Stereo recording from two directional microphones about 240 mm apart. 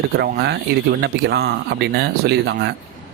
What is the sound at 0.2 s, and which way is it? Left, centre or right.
Speech, right.